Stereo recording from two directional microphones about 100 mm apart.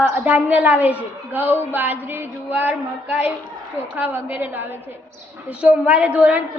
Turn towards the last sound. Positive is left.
turn(degrees=-10)  # may be behind; listen again after turning